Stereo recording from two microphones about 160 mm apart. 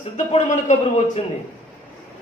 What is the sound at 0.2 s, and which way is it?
A man's voice, 50° left (ahead or behind).